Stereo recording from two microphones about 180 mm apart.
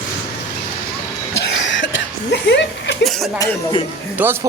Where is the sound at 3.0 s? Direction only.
Centre (ahead or behind).